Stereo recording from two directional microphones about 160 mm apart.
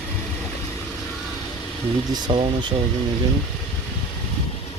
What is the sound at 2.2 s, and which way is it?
Speech, 30° right (ahead or behind).